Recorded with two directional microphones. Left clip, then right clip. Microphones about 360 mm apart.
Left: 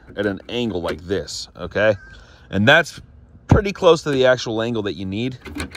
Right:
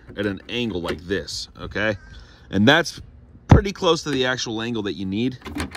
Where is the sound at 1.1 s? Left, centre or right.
Centre.